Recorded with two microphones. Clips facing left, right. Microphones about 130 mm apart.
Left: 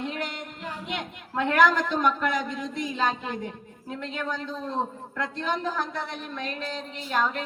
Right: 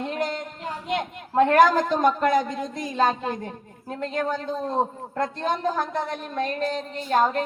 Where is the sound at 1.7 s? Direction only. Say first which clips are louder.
Right 4 dB; 45° right (ahead or behind).